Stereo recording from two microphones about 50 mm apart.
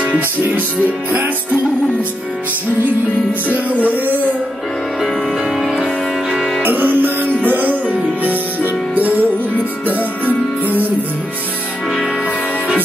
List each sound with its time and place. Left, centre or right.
0.6 s music: right
3.4 s music: right
5.6 s music: centre
6.6 s music: right
10.6 s music: right